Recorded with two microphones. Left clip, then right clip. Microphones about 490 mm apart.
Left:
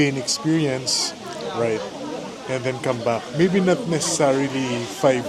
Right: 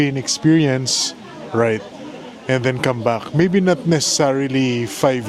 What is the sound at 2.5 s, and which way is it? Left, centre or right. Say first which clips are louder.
Speech: right 6 dB; right.